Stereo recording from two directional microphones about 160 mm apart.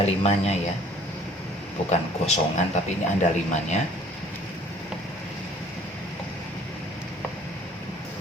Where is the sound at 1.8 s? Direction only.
40° left (ahead or behind).